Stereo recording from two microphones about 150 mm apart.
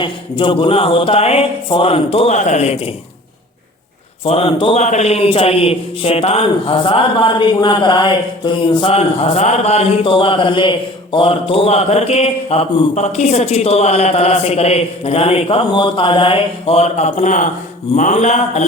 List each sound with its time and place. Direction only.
0.0 s speech: 35° left (ahead or behind)
2.3 s a man's voice: 55° left (ahead or behind)
4.2 s a man's voice: 40° left (ahead or behind)